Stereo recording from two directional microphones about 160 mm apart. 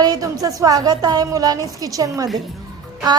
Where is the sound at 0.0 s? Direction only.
25° right (ahead or behind).